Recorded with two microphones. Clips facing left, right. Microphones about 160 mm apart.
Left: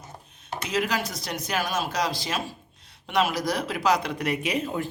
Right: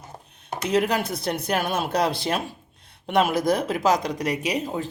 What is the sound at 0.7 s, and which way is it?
Speech, 55° right (ahead or behind).